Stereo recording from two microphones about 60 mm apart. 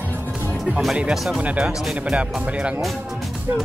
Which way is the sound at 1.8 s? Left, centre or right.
Centre.